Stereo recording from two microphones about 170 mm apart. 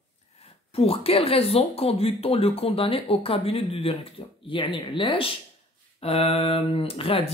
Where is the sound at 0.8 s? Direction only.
35° left (ahead or behind).